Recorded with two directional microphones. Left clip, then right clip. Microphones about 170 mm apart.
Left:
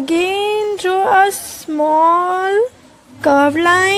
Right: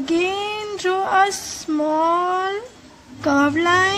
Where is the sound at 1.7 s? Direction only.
20° left (ahead or behind).